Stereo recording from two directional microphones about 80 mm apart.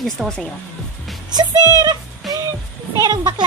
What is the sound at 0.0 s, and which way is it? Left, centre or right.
Speech, centre.